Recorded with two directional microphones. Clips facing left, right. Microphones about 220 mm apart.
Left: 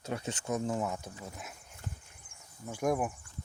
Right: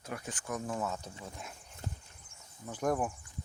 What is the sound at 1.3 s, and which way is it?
Speech, 5° left (ahead or behind).